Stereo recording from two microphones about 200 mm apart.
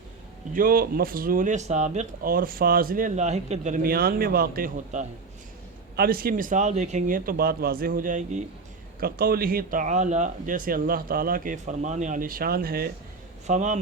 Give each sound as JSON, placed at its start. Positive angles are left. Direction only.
{"t": 0.5, "sound": "speech", "side_deg": -45}
{"t": 9.0, "sound": "speech", "side_deg": -50}
{"t": 13.5, "sound": "speech", "side_deg": -35}